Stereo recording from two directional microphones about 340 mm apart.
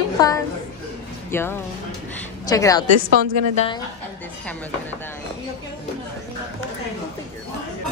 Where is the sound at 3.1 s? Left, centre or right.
Right.